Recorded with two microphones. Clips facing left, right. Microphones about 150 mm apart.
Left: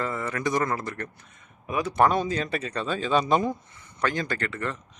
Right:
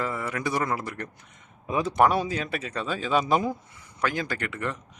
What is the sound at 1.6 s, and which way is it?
Speech, 25° right (ahead or behind).